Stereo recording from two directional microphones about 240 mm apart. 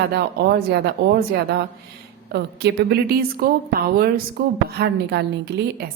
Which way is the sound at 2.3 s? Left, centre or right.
Right.